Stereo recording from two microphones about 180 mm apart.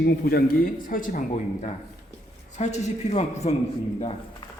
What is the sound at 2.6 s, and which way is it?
A man's voice, 40° left (ahead or behind).